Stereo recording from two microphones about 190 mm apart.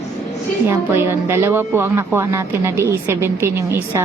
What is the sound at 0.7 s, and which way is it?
Speech, 15° right (ahead or behind).